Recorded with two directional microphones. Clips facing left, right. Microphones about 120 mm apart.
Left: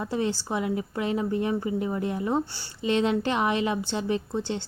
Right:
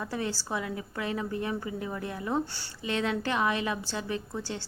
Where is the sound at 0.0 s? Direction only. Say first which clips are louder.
Left 5 dB; 20° left (ahead or behind).